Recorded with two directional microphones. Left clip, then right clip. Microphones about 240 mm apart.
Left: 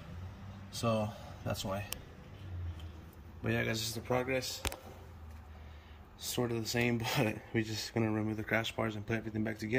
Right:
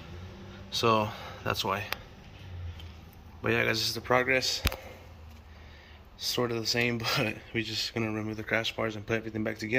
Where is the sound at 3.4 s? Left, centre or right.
Centre.